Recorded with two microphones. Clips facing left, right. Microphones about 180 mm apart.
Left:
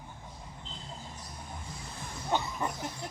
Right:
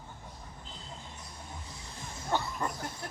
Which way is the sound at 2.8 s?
25° left (ahead or behind).